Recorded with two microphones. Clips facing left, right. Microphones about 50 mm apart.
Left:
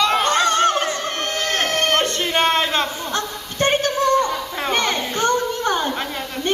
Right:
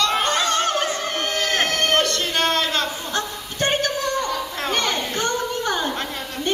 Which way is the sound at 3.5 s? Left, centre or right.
Left.